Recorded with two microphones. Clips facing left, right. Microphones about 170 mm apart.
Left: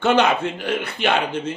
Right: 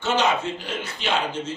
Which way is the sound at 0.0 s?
60° left (ahead or behind).